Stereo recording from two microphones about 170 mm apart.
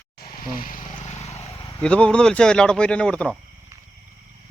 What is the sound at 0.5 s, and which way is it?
Boat, 55° left (ahead or behind).